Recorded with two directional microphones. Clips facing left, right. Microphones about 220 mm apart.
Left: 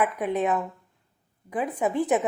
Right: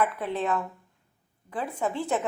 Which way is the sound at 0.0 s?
20° left (ahead or behind).